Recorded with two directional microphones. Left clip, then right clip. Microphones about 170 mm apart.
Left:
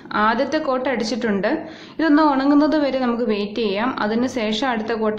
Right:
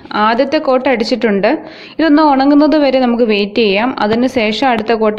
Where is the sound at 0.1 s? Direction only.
35° right (ahead or behind).